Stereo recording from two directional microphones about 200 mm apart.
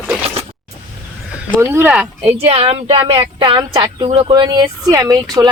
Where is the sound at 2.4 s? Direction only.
30° right (ahead or behind).